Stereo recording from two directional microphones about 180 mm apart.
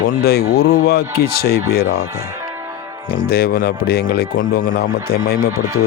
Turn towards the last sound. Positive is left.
turn(degrees=55)  # may be behind; listen again after turning